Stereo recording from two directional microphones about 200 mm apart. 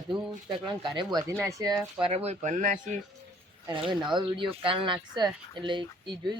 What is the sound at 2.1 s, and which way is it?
Speech, 30° right (ahead or behind).